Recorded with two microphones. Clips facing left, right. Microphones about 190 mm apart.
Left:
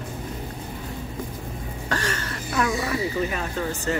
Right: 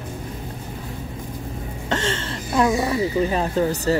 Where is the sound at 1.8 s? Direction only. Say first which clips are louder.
Right 4 dB; 25° right (ahead or behind).